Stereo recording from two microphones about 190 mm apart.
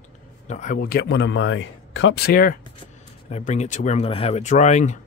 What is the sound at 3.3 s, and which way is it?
Speech, 35° left (ahead or behind).